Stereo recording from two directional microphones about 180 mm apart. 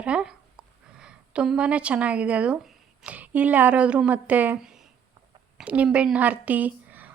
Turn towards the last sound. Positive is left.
turn(degrees=-10)  # may be behind; listen again after turning